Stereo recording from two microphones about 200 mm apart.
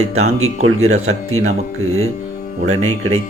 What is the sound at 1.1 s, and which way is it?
Speech, 90° right.